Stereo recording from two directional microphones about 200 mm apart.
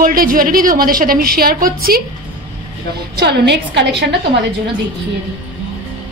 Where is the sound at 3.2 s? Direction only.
55° right (ahead or behind).